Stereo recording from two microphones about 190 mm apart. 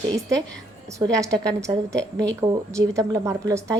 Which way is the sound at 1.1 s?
15° right (ahead or behind).